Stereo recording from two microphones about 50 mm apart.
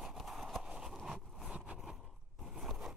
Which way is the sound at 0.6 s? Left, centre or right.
Centre.